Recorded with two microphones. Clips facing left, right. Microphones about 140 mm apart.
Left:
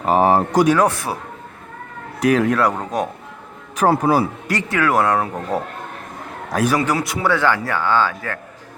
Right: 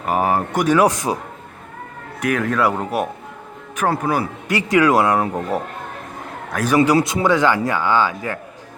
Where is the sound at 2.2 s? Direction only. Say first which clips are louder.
Left 5 dB; 30° left (ahead or behind).